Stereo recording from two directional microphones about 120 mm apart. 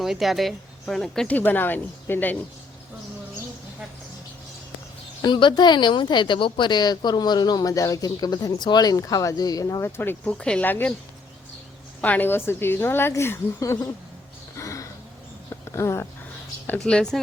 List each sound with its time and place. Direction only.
0.0 s speech: centre (ahead or behind)
1.4 s speech: 15° left (ahead or behind)
5.2 s a woman's voice: 40° left (ahead or behind)
10.0 s speech: 15° left (ahead or behind)
12.0 s a woman's voice: 15° left (ahead or behind)
14.5 s a sound: 25° left (ahead or behind)
16.6 s speech: 10° left (ahead or behind)